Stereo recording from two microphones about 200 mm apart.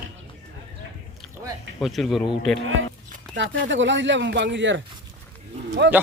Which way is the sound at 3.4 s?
65° right (ahead or behind).